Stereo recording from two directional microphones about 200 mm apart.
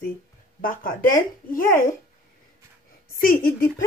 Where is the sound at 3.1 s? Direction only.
45° left (ahead or behind).